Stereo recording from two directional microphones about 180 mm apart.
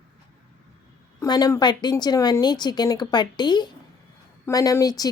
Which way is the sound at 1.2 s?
20° left (ahead or behind).